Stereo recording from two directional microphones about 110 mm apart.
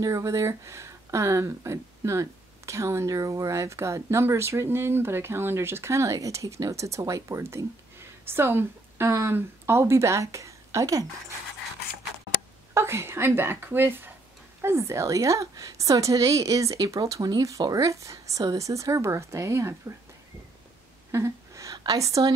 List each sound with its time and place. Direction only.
0.0 s speech: 30° right (ahead or behind)
12.7 s a woman's voice: 25° right (ahead or behind)
21.1 s a sound: 25° right (ahead or behind)